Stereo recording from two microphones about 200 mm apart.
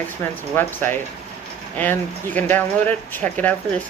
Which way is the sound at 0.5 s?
10° left (ahead or behind).